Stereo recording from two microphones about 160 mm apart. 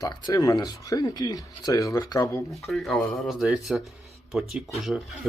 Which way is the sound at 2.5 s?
Centre (ahead or behind).